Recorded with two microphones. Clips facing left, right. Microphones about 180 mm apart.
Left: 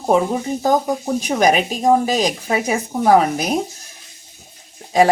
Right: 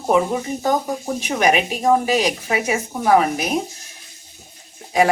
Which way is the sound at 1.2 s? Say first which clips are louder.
Left 1 dB; 40° left (ahead or behind).